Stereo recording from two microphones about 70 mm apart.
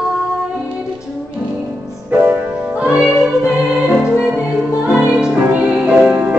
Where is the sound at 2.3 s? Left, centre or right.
Centre.